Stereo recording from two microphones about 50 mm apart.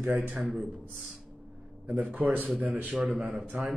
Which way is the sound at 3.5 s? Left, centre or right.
Right.